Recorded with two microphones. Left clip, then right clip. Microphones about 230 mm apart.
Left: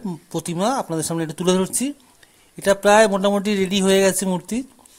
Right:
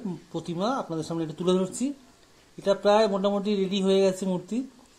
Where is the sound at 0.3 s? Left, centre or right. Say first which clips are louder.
Left 7 dB; left.